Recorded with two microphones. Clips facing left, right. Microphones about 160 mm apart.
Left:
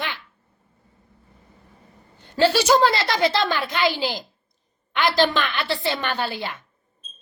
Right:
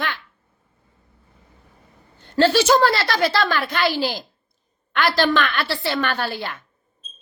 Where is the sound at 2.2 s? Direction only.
15° left (ahead or behind).